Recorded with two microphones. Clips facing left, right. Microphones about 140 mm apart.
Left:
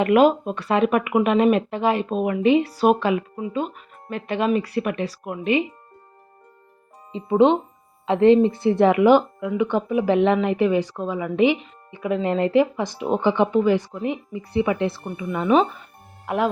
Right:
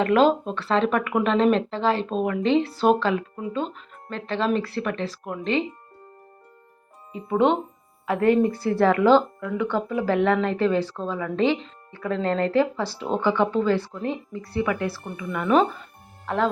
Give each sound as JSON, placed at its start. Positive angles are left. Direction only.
{"t": 0.0, "sound": "speech", "side_deg": 15}
{"t": 7.1, "sound": "speech", "side_deg": 20}
{"t": 16.2, "sound": "speech", "side_deg": 15}